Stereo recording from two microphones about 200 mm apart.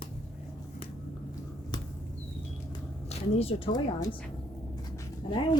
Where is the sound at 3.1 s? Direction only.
30° left (ahead or behind).